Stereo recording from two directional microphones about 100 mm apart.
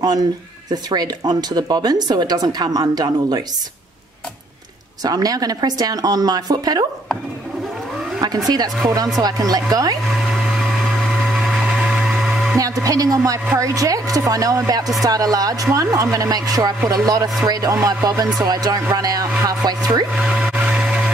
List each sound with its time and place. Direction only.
0.8 s speech: 40° right (ahead or behind)
5.0 s a woman's voice: 40° right (ahead or behind)
8.2 s a woman's voice: 40° right (ahead or behind)
10.1 s a sound: centre (ahead or behind)
12.5 s a woman's voice: 35° right (ahead or behind)
20.1 s a sound: 10° right (ahead or behind)